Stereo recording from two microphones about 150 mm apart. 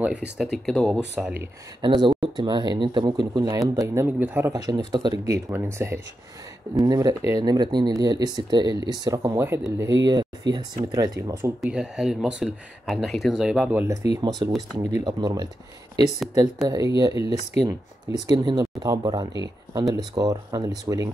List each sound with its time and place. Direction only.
0.4 s speech: centre (ahead or behind)
1.1 s speech: 10° right (ahead or behind)
1.8 s speech: 30° right (ahead or behind)
11.6 s speech: 5° right (ahead or behind)
14.1 s speech: 25° right (ahead or behind)
16.6 s speech: 20° right (ahead or behind)